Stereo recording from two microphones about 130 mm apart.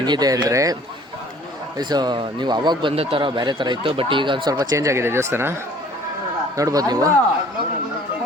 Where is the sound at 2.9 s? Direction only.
50° right (ahead or behind); by 5.5 s 20° right (ahead or behind).